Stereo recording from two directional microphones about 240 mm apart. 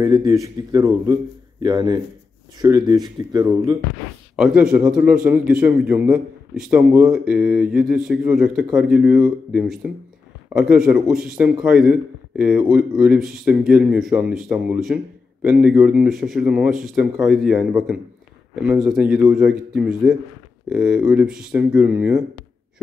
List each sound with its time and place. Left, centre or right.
0.0 s speech: centre
4.4 s a man's voice: centre